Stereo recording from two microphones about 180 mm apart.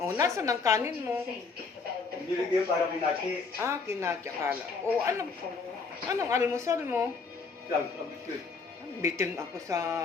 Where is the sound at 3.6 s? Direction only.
15° right (ahead or behind).